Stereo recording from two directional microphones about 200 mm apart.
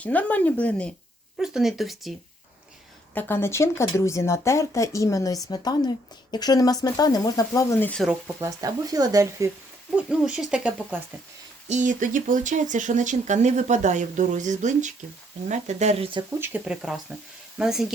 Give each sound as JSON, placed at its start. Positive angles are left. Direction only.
{"t": 0.0, "sound": "speech", "side_deg": 10}
{"t": 3.2, "sound": "speech", "side_deg": 10}
{"t": 8.4, "sound": "speech", "side_deg": -15}
{"t": 9.9, "sound": "speech", "side_deg": -5}
{"t": 11.7, "sound": "speech", "side_deg": -40}
{"t": 16.4, "sound": "speech", "side_deg": -5}